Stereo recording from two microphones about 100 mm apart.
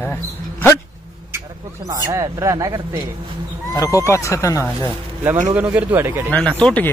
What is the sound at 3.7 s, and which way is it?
Speech, 35° left (ahead or behind).